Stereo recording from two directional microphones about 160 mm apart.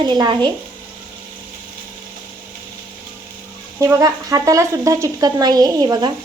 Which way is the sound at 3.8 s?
20° right (ahead or behind).